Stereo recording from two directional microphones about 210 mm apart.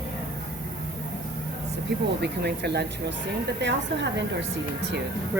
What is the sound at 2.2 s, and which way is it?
A woman's voice, 55° right (ahead or behind).